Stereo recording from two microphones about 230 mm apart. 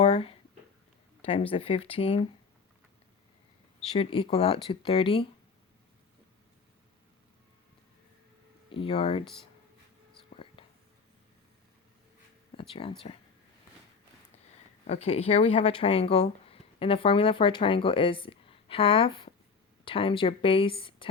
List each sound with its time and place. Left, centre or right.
0.0 s a sound: left
1.2 s speech: left
3.9 s speech: left
8.7 s speech: left
9.2 s speech: centre
10.3 s whispering: left
12.5 s speech: left
14.8 s speech: left